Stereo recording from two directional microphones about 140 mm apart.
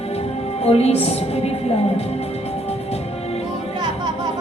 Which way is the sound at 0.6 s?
45° left (ahead or behind).